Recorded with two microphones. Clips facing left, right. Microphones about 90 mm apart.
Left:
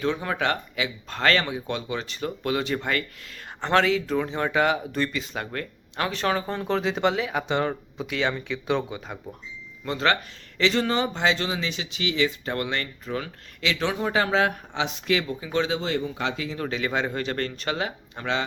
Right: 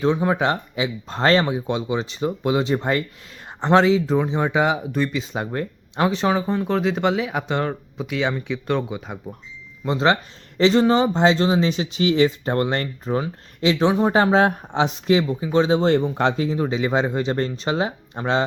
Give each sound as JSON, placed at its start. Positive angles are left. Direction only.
{"t": 0.0, "sound": "speech", "side_deg": -20}
{"t": 4.2, "sound": "speech", "side_deg": -15}
{"t": 6.3, "sound": "speech", "side_deg": -5}
{"t": 9.8, "sound": "speech", "side_deg": -20}
{"t": 15.8, "sound": "speech", "side_deg": -50}
{"t": 16.6, "sound": "speech", "side_deg": -20}